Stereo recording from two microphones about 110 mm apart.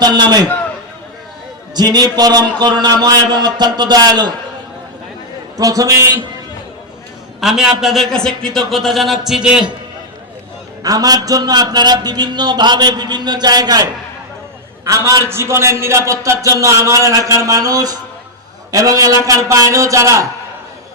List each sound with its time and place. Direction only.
0.0 s a man's voice: 40° right (ahead or behind)
1.7 s a man's voice: 40° right (ahead or behind)
5.5 s a man's voice: 30° right (ahead or behind)
7.4 s a man's voice: 5° right (ahead or behind)
10.8 s a man's voice: 35° right (ahead or behind)
14.8 s a man's voice: 30° right (ahead or behind)